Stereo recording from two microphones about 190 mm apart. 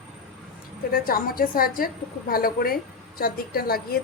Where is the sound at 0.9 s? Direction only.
50° left (ahead or behind).